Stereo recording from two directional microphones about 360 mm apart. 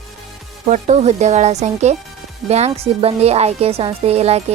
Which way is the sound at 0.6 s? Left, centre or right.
Centre.